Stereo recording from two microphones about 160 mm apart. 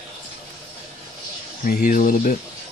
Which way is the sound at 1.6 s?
65° left (ahead or behind).